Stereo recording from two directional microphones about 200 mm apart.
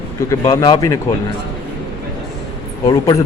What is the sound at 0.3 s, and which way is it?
Speech, 25° left (ahead or behind).